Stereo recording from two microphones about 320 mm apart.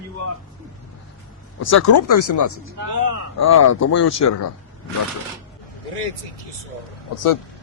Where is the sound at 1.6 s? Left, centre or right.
Left.